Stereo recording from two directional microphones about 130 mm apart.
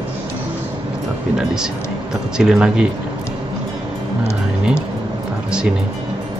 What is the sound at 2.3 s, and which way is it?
Speech, 5° right (ahead or behind).